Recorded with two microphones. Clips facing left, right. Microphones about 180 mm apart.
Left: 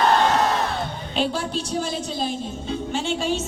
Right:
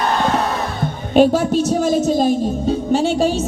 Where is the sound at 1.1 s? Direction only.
45° right (ahead or behind).